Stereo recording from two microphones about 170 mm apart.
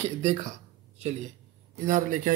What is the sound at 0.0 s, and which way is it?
Speech, 40° right (ahead or behind).